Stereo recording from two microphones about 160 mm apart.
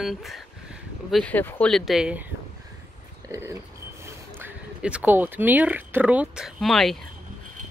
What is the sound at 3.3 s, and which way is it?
Speech, 20° right (ahead or behind).